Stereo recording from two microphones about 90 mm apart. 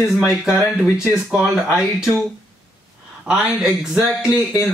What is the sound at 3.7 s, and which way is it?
Speech, centre (ahead or behind).